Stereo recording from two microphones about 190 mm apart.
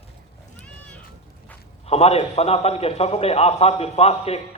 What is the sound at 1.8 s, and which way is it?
A man's voice, 35° left (ahead or behind).